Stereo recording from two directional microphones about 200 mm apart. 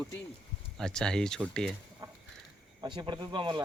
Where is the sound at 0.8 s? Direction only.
5° left (ahead or behind).